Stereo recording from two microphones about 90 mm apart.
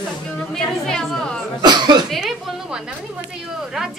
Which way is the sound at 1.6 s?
55° right (ahead or behind).